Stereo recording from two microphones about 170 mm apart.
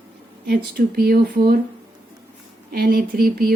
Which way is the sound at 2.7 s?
60° right (ahead or behind).